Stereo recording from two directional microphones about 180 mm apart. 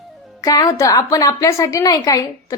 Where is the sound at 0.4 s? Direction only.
20° left (ahead or behind).